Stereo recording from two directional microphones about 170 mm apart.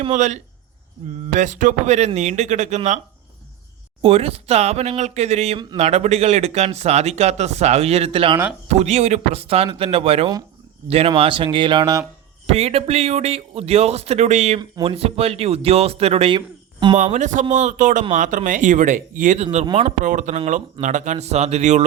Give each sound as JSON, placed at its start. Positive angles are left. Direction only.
{"t": 0.1, "sound": "speech", "side_deg": -45}
{"t": 4.0, "sound": "speech", "side_deg": -35}
{"t": 12.5, "sound": "speech", "side_deg": -35}
{"t": 14.6, "sound": "speech", "side_deg": -30}
{"t": 17.0, "sound": "speech", "side_deg": -45}
{"t": 20.1, "sound": "speech", "side_deg": -45}